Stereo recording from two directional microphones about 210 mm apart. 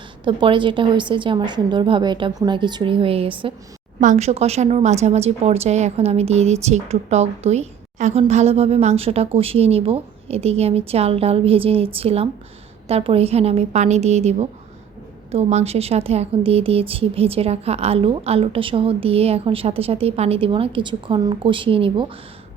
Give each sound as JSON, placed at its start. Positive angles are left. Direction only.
{"t": 0.3, "sound": "a woman's voice", "side_deg": -25}